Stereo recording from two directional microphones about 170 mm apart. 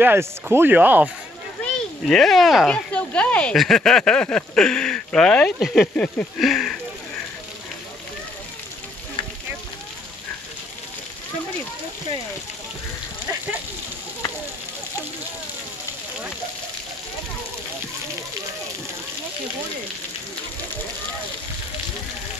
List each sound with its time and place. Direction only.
0.0 s speech: 15° right (ahead or behind)
1.6 s speech: centre (ahead or behind)